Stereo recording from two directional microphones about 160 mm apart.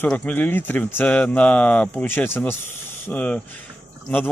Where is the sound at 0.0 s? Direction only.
10° left (ahead or behind).